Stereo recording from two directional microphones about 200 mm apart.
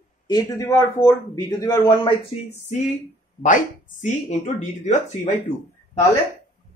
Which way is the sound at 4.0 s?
35° left (ahead or behind).